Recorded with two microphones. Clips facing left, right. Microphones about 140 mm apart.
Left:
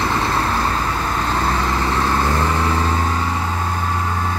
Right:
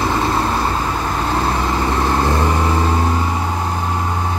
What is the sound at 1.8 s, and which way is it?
Vehicle, 15° right (ahead or behind).